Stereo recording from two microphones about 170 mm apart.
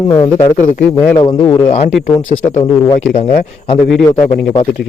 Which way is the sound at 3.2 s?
35° left (ahead or behind).